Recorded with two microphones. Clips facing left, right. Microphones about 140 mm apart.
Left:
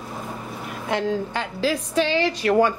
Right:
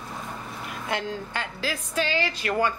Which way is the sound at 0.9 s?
Centre (ahead or behind).